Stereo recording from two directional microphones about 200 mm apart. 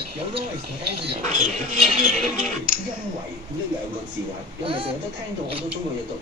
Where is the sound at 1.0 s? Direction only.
40° right (ahead or behind).